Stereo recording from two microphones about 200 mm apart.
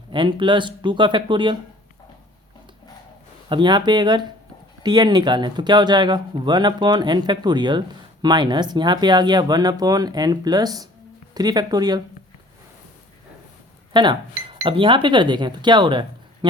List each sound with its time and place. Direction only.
0.1 s speech: 25° right (ahead or behind)
3.5 s speech: 25° right (ahead or behind)
13.9 s speech: 20° right (ahead or behind)